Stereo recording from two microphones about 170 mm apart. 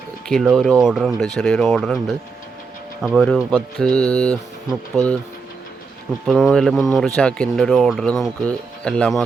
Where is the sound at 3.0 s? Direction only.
Centre (ahead or behind).